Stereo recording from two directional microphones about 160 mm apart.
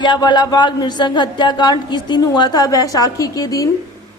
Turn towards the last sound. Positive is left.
turn(degrees=20)  # may be behind; listen again after turning